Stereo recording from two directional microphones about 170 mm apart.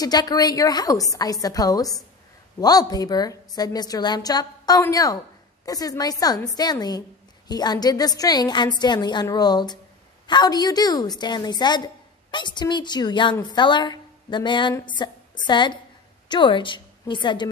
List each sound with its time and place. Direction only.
0.0 s a woman's voice: 25° left (ahead or behind)